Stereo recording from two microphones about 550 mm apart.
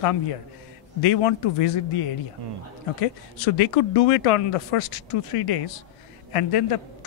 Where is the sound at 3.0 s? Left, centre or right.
Left.